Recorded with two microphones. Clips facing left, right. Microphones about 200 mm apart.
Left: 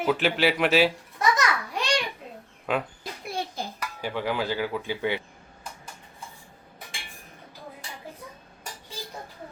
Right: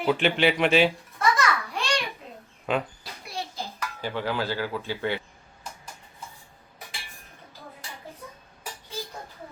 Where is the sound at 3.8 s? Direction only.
10° left (ahead or behind).